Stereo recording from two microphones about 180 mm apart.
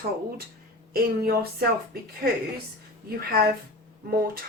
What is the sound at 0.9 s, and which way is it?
Speech, 55° right (ahead or behind).